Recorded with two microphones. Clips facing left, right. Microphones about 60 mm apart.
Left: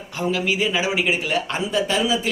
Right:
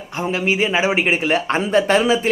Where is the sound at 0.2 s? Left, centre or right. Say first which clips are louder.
Right 2 dB; right.